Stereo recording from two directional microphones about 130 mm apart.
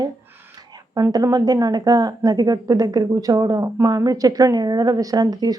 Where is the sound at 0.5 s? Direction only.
30° right (ahead or behind).